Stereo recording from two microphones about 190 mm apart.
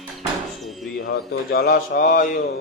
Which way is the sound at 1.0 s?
55° left (ahead or behind).